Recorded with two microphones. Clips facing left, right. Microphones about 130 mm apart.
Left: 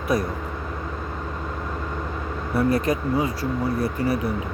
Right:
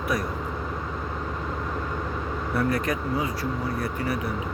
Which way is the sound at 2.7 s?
30° left (ahead or behind).